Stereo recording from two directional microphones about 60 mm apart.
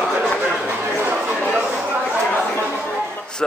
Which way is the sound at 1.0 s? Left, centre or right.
Right.